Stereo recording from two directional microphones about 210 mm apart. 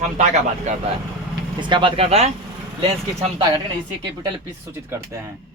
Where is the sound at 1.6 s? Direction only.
25° right (ahead or behind).